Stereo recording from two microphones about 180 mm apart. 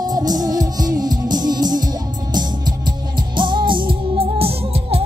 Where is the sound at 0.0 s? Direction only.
20° right (ahead or behind).